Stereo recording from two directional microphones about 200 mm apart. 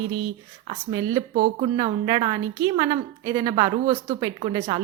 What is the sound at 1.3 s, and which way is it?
Speech, 45° right (ahead or behind).